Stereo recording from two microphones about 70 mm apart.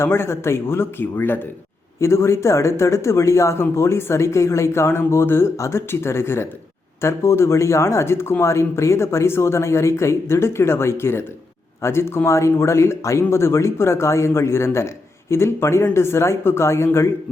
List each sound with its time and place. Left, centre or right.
0.0 s speech: left
2.0 s speech: left